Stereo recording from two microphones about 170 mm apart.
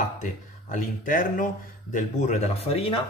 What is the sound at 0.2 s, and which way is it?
Speech, 45° left (ahead or behind).